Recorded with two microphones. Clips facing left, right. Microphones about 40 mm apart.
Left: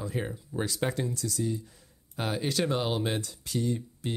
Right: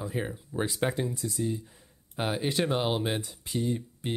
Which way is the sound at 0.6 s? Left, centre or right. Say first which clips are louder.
Right 1 dB; right.